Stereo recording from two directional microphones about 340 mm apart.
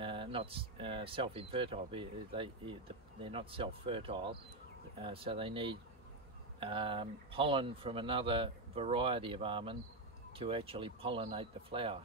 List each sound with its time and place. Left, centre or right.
0.0 s speech: centre